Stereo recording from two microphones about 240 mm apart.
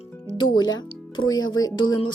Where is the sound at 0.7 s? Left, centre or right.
Centre.